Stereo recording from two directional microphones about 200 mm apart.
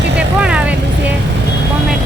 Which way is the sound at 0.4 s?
5° right (ahead or behind).